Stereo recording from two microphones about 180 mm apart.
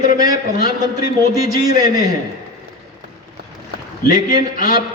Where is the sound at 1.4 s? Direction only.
20° right (ahead or behind).